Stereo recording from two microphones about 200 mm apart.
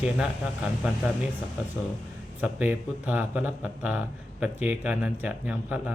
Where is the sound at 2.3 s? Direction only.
10° right (ahead or behind).